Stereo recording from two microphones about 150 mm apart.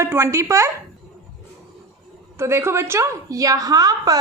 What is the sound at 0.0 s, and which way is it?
Speech, 20° right (ahead or behind).